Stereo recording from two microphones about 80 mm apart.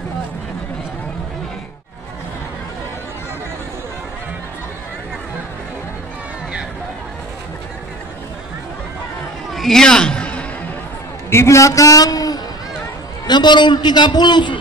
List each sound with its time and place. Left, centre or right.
9.5 s a sound: centre
11.2 s a man's voice: left
13.3 s a man's voice: left